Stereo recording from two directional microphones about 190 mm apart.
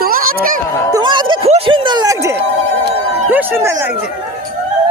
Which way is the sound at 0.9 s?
25° right (ahead or behind).